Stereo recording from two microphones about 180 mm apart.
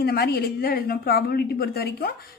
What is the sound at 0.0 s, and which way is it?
A woman's voice, 60° left (ahead or behind).